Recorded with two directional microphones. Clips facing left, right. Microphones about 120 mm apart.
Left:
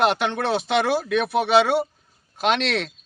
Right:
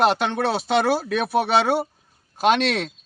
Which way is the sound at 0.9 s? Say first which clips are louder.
Even; 35° right (ahead or behind).